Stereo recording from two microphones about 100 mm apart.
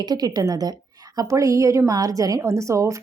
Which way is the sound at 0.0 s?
40° right (ahead or behind).